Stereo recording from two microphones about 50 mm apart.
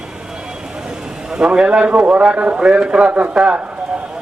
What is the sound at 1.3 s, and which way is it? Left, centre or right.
A man's voice, centre.